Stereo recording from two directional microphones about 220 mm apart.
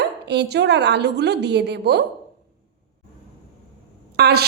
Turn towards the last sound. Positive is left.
turn(degrees=-45)  # may be behind; listen again after turning